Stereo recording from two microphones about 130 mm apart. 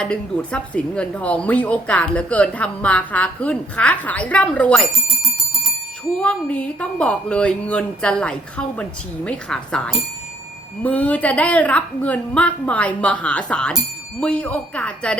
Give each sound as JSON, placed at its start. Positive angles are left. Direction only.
{"t": 0.0, "sound": "a woman's voice", "side_deg": 5}
{"t": 6.1, "sound": "a woman's voice", "side_deg": 10}